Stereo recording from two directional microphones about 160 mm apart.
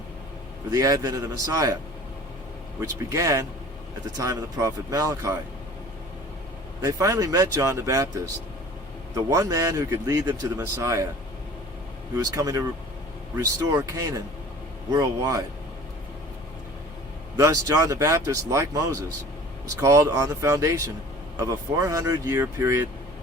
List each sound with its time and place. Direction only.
0.7 s speech: 20° right (ahead or behind)
3.1 s speech: 20° right (ahead or behind)
6.8 s speech: 20° right (ahead or behind)
9.1 s speech: 20° right (ahead or behind)
12.1 s speech: 20° right (ahead or behind)
17.3 s speech: 20° right (ahead or behind)